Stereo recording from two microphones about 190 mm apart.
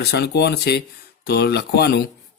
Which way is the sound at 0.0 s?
60° left (ahead or behind).